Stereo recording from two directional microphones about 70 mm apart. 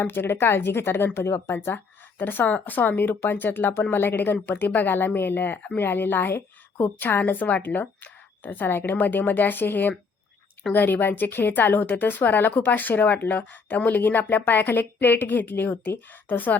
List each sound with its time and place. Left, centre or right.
0.0 s speech: left